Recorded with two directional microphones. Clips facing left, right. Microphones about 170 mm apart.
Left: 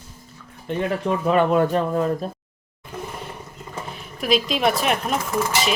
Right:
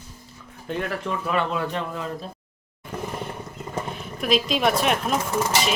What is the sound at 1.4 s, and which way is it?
Speech, 50° left (ahead or behind).